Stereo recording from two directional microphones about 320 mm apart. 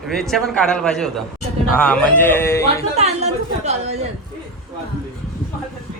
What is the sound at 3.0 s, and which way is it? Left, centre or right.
A woman's voice, centre.